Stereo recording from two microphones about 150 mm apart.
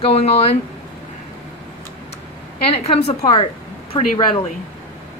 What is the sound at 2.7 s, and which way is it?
Speech, 40° left (ahead or behind).